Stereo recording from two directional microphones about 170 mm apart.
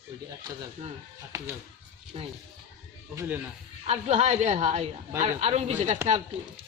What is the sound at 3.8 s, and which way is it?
A woman's voice, 40° right (ahead or behind).